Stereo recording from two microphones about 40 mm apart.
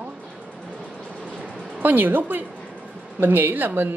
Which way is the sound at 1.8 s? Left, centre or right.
Right.